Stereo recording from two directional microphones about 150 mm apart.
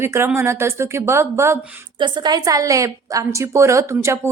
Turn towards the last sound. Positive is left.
turn(degrees=-20)  # may be behind; listen again after turning